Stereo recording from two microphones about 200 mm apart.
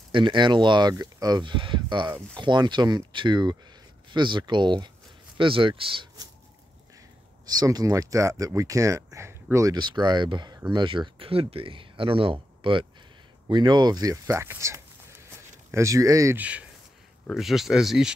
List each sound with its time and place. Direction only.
0.1 s speech: 25° right (ahead or behind)
7.4 s speech: 20° right (ahead or behind); by 18.1 s 5° right (ahead or behind)